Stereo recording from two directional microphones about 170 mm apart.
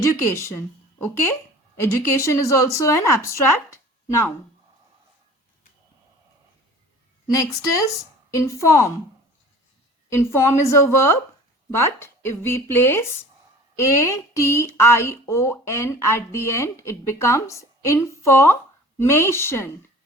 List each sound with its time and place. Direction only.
0.3 s speech: 15° left (ahead or behind)
7.3 s a woman's voice: 20° left (ahead or behind)
10.1 s speech: 15° left (ahead or behind)